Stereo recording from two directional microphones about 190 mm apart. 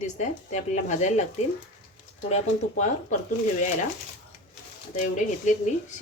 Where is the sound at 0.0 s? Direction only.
40° left (ahead or behind).